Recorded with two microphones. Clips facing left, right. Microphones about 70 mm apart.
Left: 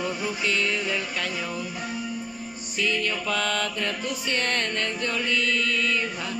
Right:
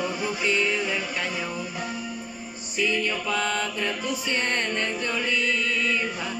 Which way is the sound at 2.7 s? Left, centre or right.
Centre.